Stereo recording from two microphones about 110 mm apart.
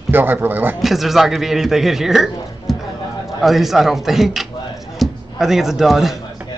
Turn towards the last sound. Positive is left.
turn(degrees=0)  # may be behind; listen again after turning